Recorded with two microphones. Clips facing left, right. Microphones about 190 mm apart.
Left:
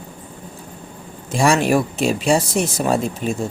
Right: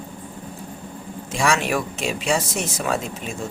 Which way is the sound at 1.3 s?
35° left (ahead or behind).